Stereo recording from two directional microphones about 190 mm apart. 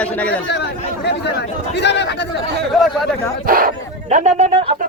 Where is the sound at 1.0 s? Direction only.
60° left (ahead or behind).